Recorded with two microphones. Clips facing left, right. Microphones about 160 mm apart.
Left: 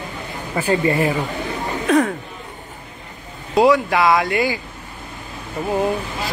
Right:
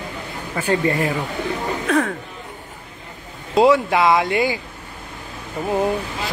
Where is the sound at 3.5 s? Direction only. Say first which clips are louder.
Even; 20° right (ahead or behind).